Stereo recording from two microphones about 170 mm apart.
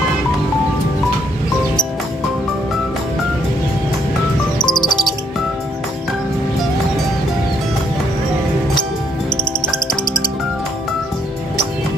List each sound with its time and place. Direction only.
4.6 s music: 25° left (ahead or behind)